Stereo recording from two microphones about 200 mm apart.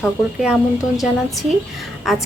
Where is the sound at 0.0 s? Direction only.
Centre (ahead or behind).